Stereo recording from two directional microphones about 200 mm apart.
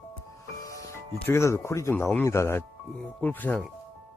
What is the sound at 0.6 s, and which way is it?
Speech, 15° left (ahead or behind).